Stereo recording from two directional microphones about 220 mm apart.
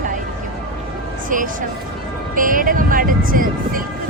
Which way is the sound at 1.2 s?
35° right (ahead or behind).